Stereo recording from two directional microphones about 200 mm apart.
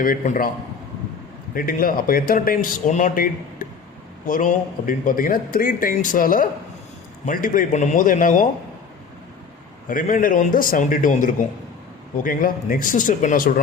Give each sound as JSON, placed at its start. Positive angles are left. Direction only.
{"t": 0.0, "sound": "a man's voice", "side_deg": 45}
{"t": 1.5, "sound": "a man's voice", "side_deg": 45}
{"t": 9.9, "sound": "a man's voice", "side_deg": 45}